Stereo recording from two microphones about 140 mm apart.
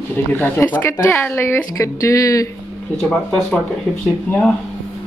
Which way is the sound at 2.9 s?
5° left (ahead or behind).